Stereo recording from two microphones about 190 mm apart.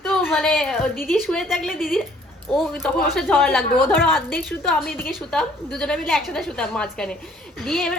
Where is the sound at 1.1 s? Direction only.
Centre (ahead or behind).